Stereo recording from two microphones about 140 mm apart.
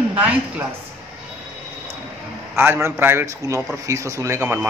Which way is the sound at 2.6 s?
15° right (ahead or behind).